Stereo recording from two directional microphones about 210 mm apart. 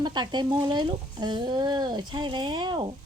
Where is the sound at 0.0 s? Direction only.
20° right (ahead or behind).